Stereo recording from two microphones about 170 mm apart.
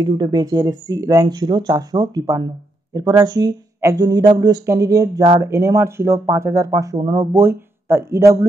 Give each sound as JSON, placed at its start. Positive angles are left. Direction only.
{"t": 0.0, "sound": "speech", "side_deg": -25}